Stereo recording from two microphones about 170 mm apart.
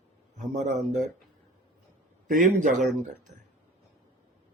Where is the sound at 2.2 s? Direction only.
50° right (ahead or behind).